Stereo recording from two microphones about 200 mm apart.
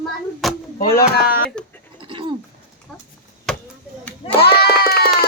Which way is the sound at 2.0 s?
25° right (ahead or behind).